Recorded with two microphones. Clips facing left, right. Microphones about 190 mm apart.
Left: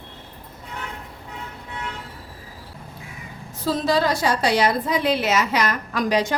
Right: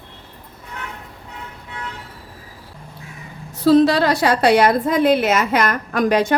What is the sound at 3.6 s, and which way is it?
A woman's voice, 70° right (ahead or behind).